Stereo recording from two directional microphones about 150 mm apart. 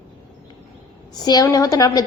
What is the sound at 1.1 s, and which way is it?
Speech, 25° left (ahead or behind).